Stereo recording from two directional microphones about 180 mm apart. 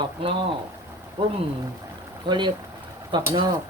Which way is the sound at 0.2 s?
30° right (ahead or behind).